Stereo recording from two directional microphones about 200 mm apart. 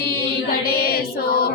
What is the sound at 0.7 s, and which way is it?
Music, 50° left (ahead or behind).